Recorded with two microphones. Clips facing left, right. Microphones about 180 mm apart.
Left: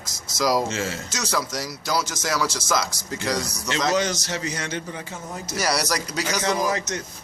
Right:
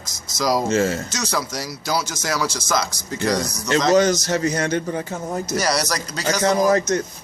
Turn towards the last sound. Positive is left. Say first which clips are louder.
# right 7 dB
turn(degrees=-45)  # may be behind; listen again after turning